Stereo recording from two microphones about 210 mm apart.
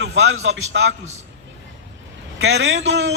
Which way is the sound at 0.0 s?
60° right (ahead or behind).